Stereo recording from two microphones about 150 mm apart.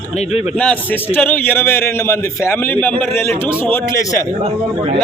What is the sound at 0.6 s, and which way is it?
A man's voice, 10° left (ahead or behind).